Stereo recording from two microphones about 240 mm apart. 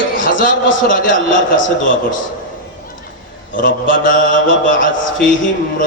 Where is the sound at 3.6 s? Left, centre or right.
Left.